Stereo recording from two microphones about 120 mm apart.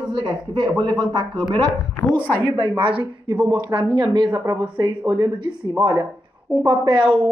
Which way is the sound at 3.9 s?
40° right (ahead or behind).